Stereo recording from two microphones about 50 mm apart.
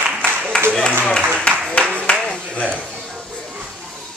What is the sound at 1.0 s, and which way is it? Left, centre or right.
Speech, centre.